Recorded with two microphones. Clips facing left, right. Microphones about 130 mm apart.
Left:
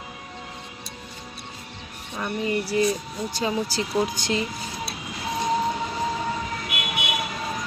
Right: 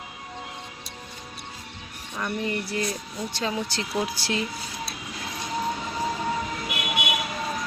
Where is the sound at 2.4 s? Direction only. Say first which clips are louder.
Left 8 dB; 5° left (ahead or behind).